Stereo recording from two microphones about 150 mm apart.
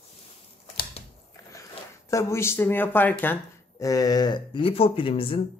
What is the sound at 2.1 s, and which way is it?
Speech, 20° left (ahead or behind).